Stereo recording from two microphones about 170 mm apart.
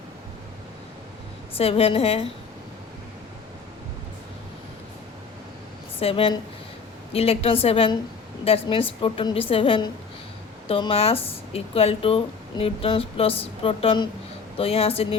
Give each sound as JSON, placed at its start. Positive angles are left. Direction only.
{"t": 1.5, "sound": "speech", "side_deg": 35}
{"t": 6.0, "sound": "speech", "side_deg": 35}